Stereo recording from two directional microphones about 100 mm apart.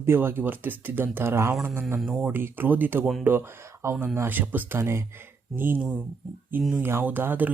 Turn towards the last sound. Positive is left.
turn(degrees=-20)  # may be behind; listen again after turning